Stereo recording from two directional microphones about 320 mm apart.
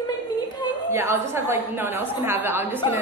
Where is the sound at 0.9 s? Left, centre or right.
Centre.